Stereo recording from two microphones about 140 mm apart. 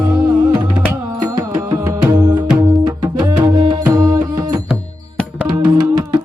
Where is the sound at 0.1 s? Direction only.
25° right (ahead or behind).